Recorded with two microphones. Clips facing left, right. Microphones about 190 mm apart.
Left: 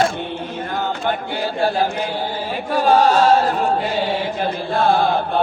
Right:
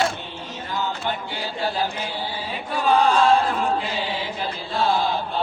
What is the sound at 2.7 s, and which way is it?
Chant, 45° left (ahead or behind).